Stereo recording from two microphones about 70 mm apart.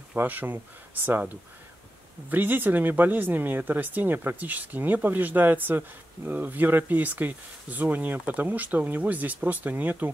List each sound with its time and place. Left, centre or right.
0.1 s speech: right
2.2 s speech: right